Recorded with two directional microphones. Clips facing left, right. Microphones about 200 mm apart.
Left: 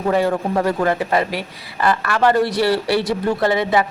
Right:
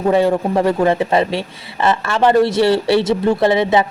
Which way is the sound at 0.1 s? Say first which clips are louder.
Right 3 dB; 25° right (ahead or behind).